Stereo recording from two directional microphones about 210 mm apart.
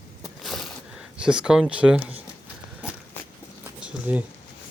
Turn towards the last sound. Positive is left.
turn(degrees=-5)  # may be behind; listen again after turning